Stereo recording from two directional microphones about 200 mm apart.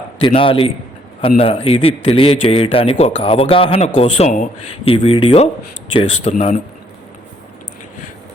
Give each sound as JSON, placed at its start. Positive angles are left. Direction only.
{"t": 0.2, "sound": "a man's voice", "side_deg": 25}